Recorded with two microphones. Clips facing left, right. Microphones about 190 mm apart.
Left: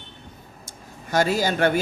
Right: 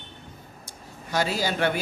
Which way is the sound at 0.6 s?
50° left (ahead or behind).